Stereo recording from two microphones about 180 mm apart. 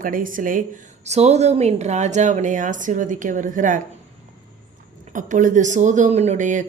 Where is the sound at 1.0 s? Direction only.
35° right (ahead or behind).